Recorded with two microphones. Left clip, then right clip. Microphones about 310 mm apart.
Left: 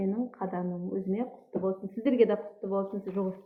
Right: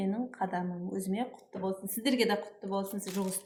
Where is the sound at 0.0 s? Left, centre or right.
Right.